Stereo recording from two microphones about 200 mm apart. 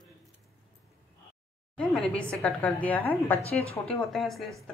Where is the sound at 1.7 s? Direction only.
5° left (ahead or behind).